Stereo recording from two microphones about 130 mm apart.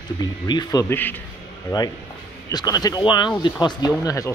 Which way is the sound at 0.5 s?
30° left (ahead or behind).